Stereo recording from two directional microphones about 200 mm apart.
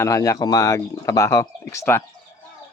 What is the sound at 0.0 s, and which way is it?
Speech, 15° left (ahead or behind).